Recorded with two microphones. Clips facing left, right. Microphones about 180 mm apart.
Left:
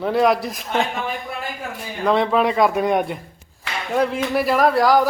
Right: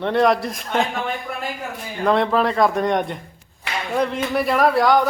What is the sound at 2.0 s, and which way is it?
A man's voice, centre (ahead or behind).